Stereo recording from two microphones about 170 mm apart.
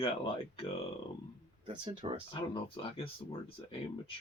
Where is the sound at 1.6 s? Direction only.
30° right (ahead or behind).